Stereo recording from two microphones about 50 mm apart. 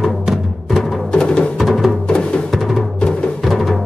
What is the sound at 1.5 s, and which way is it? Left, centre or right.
Music, centre.